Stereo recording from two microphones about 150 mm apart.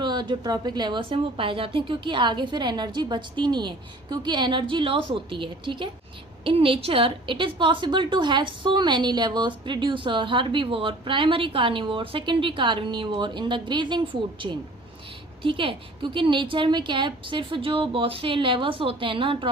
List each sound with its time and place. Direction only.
0.0 s a woman's voice: 30° right (ahead or behind)